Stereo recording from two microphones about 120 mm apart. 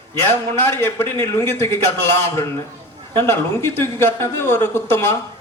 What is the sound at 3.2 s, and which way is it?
Speech, 20° left (ahead or behind).